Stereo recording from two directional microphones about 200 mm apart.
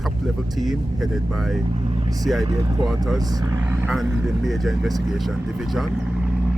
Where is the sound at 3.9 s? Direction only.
Centre (ahead or behind).